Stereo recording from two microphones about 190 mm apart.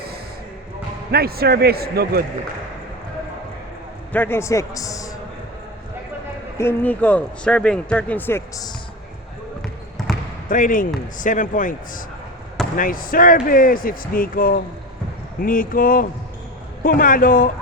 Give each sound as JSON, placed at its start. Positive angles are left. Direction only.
{"t": 1.1, "sound": "speech", "side_deg": -55}
{"t": 4.1, "sound": "a man's voice", "side_deg": 10}
{"t": 6.6, "sound": "a man's voice", "side_deg": 10}
{"t": 10.5, "sound": "speech", "side_deg": 45}